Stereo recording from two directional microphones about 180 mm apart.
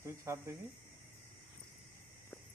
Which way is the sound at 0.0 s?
15° right (ahead or behind).